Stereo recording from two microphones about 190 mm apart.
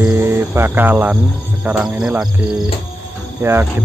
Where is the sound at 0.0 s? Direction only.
10° right (ahead or behind).